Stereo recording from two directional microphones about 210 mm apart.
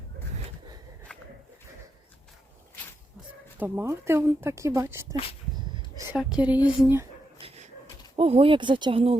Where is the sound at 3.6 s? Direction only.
10° right (ahead or behind).